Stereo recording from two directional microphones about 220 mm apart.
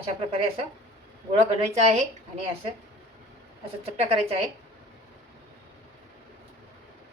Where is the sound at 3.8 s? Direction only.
25° right (ahead or behind).